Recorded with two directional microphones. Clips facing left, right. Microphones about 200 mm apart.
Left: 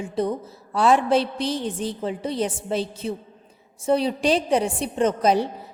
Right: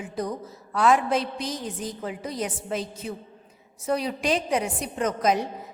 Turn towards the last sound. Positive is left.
turn(degrees=30)  # may be behind; listen again after turning